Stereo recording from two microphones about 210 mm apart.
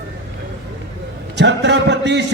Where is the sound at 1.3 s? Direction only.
55° right (ahead or behind).